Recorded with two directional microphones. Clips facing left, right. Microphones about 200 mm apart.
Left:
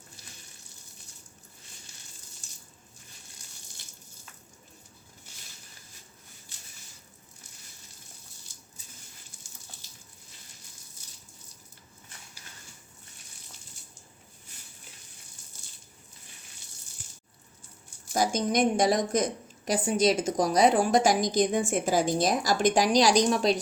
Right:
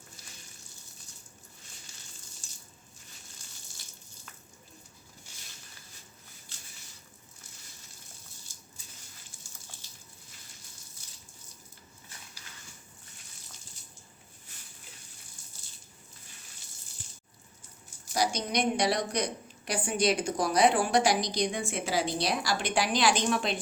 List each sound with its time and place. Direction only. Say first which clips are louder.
18.1 s a woman's voice: left 4 dB; 45° left (ahead or behind)